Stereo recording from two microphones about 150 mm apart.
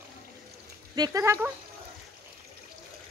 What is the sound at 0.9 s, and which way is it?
Speech, 25° right (ahead or behind).